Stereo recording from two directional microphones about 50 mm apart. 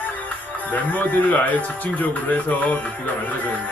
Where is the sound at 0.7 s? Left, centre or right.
Left.